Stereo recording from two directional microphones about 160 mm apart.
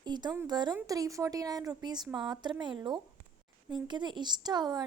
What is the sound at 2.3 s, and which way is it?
A woman's voice, 25° right (ahead or behind).